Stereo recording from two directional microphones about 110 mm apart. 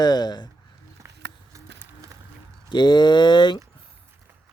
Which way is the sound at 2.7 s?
45° left (ahead or behind).